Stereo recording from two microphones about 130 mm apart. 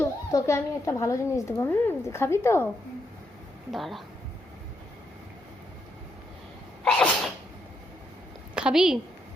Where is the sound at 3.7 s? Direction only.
Centre (ahead or behind).